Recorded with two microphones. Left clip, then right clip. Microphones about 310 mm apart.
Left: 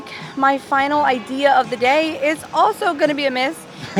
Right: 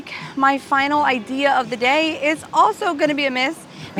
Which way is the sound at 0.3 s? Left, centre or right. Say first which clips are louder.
Left 1 dB; centre.